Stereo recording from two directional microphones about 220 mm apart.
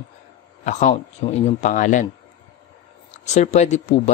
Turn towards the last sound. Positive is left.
turn(degrees=30)  # may be behind; listen again after turning